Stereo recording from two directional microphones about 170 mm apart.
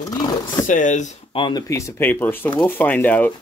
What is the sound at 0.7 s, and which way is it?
Speech, 50° left (ahead or behind).